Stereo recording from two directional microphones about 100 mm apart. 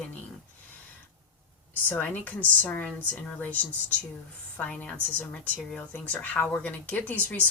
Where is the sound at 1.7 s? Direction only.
15° left (ahead or behind).